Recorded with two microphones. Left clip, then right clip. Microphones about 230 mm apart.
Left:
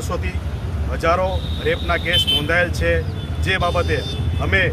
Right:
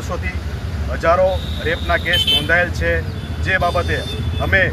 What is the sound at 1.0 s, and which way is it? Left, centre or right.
Speech, centre.